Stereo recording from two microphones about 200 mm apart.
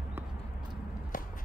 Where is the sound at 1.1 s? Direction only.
40° left (ahead or behind).